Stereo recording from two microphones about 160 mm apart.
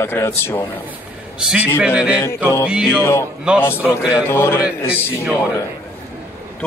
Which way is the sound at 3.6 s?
15° left (ahead or behind).